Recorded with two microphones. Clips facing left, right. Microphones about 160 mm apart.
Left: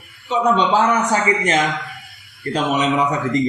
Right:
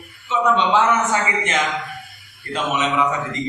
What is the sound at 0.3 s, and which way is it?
Speech, 35° left (ahead or behind).